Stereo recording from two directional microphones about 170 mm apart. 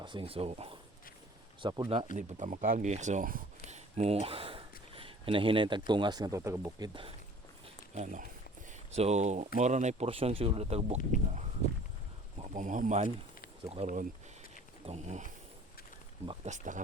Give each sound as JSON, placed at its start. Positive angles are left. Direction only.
{"t": 0.0, "sound": "speech", "side_deg": -30}
{"t": 2.1, "sound": "speech", "side_deg": -45}
{"t": 3.7, "sound": "speech", "side_deg": -40}
{"t": 7.9, "sound": "speech", "side_deg": -45}
{"t": 12.4, "sound": "speech", "side_deg": -50}
{"t": 16.5, "sound": "speech", "side_deg": -50}